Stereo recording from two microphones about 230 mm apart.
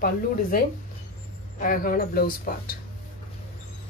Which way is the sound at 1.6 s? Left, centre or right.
Left.